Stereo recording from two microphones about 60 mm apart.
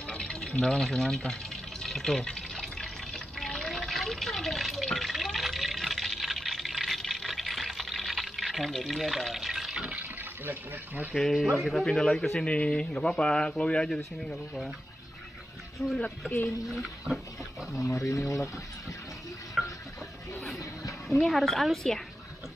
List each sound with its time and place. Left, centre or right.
0.0 s a sound: centre
9.9 s water: right
11.1 s speech: centre
15.8 s speech: centre
17.1 s pig: centre
17.9 s speech: left
19.6 s stir: centre
20.5 s a sound: left
21.3 s speech: centre